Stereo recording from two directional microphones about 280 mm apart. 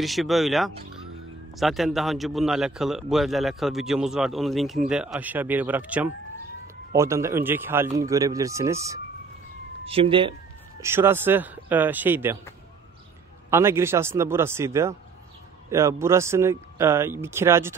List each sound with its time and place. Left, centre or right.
0.0 s a man's voice: centre
13.5 s a man's voice: centre